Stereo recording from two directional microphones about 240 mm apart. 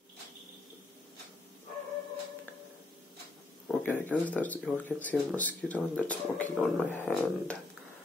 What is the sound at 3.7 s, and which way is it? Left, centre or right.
Speech, centre.